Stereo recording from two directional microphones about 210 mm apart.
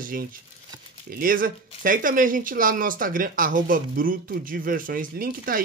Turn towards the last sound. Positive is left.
turn(degrees=-45)  # may be behind; listen again after turning